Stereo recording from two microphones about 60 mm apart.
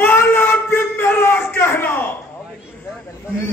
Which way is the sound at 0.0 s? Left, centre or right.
Left.